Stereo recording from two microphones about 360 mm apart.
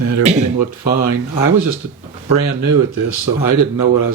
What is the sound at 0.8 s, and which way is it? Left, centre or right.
Speech, left.